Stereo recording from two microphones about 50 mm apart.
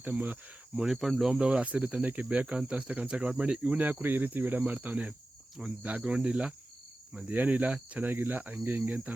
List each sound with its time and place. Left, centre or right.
0.0 s speech: right
0.9 s speech: centre
1.3 s speech: centre
3.8 s speech: right
5.6 s speech: centre
7.3 s speech: right
8.1 s speech: right